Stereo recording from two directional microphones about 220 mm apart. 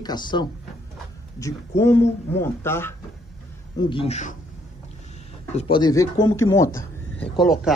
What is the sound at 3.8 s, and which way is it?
Speech, 25° left (ahead or behind).